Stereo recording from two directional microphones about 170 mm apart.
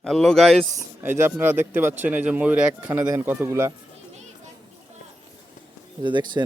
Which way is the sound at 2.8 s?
20° right (ahead or behind).